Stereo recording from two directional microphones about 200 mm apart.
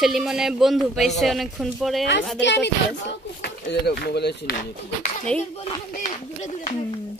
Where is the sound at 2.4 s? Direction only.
60° left (ahead or behind); by 5.1 s 45° left (ahead or behind).